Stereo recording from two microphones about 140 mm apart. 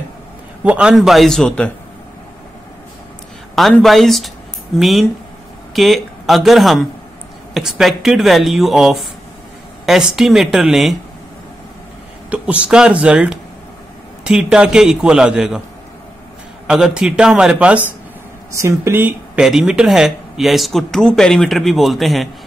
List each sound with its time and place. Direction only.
0.7 s speech: 5° right (ahead or behind)
3.5 s speech: centre (ahead or behind)
12.3 s speech: 10° right (ahead or behind)
16.6 s speech: 5° right (ahead or behind)
18.5 s speech: 20° right (ahead or behind)
19.4 s speech: 5° right (ahead or behind)